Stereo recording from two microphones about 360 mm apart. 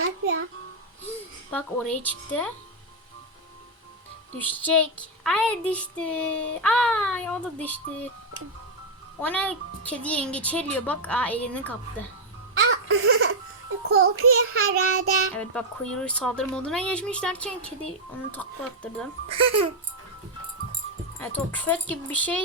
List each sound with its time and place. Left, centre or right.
0.0 s a child's voice: right
1.0 s speech: centre
4.4 s speech: centre
9.2 s speech: centre
12.5 s music: right
13.8 s child singing: right
15.4 s speech: centre
19.3 s a child's voice: centre
21.2 s speech: centre